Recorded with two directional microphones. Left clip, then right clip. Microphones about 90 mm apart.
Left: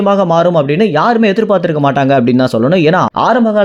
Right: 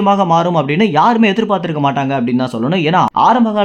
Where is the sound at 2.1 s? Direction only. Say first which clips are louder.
Left 7 dB; 85° left.